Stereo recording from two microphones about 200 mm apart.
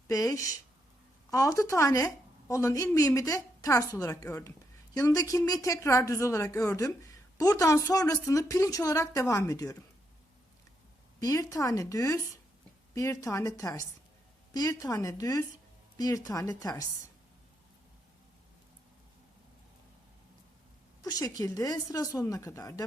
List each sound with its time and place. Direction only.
0.1 s speech: 15° left (ahead or behind)
11.2 s speech: 15° left (ahead or behind)
21.0 s speech: 20° left (ahead or behind)